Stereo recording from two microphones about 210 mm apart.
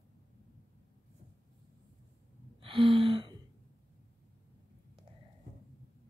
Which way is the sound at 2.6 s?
25° right (ahead or behind).